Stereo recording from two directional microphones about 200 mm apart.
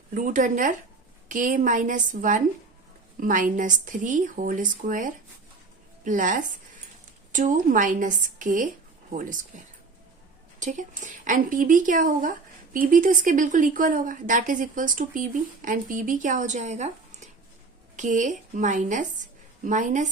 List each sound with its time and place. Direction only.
0.1 s speech: 40° right (ahead or behind)
10.6 s speech: 40° right (ahead or behind)